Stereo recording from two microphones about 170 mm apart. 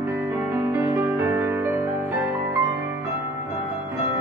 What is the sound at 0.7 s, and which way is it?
Music, 15° right (ahead or behind).